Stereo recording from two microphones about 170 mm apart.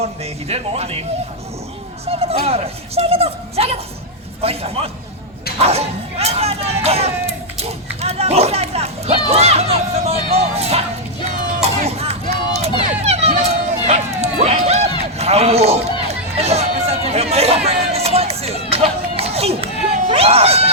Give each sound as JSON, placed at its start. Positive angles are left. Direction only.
{"t": 0.0, "sound": "speech", "side_deg": -35}
{"t": 2.0, "sound": "speech", "side_deg": -35}
{"t": 5.5, "sound": "hubbub", "side_deg": -35}
{"t": 11.6, "sound": "crowd", "side_deg": -40}
{"t": 13.0, "sound": "a sound", "side_deg": -35}